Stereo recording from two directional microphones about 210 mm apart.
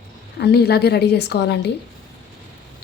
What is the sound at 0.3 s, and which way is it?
Speech, 50° left (ahead or behind).